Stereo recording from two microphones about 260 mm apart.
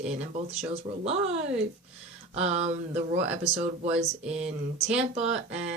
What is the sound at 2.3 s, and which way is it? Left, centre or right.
Speech, right.